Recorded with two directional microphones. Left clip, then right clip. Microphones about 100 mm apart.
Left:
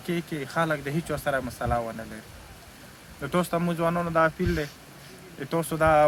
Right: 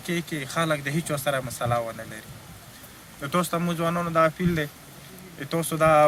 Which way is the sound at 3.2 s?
20° left (ahead or behind).